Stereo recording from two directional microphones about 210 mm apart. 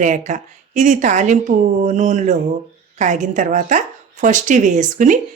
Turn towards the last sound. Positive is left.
turn(degrees=-40)  # may be behind; listen again after turning